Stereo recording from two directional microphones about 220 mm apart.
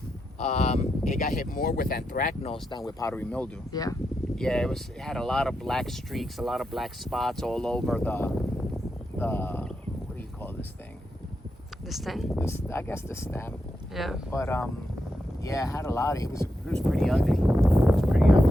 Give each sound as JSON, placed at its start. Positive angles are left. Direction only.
{"t": 0.3, "sound": "speech", "side_deg": 30}
{"t": 2.4, "sound": "speech", "side_deg": 20}
{"t": 4.4, "sound": "speech", "side_deg": 0}
{"t": 9.1, "sound": "a sound", "side_deg": 10}
{"t": 11.9, "sound": "speech", "side_deg": 0}
{"t": 12.4, "sound": "speech", "side_deg": 10}
{"t": 13.9, "sound": "speech", "side_deg": 0}
{"t": 14.3, "sound": "speech", "side_deg": 10}